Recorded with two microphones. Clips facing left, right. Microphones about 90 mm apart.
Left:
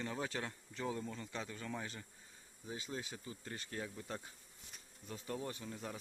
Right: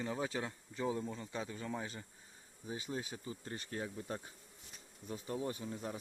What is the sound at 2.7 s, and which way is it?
Speech, 25° right (ahead or behind).